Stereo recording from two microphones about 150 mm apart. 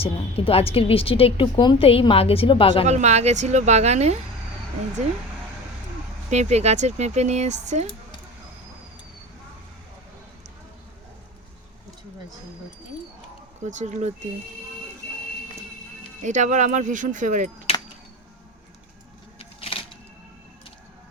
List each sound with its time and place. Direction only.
0.0 s a woman's voice: 40° left (ahead or behind)
2.8 s speech: 50° right (ahead or behind)
6.3 s speech: 50° right (ahead or behind)
13.7 s speech: 50° right (ahead or behind)
16.2 s speech: 55° right (ahead or behind)
19.4 s a sound: 35° left (ahead or behind)